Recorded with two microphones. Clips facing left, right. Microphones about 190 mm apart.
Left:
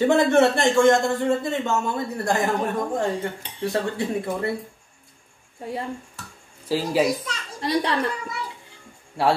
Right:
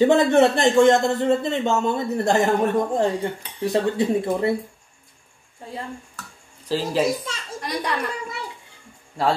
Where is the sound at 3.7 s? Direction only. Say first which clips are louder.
Right 5 dB; 20° right (ahead or behind).